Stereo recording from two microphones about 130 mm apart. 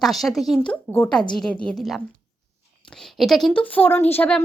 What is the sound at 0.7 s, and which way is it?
A woman's voice, 15° left (ahead or behind).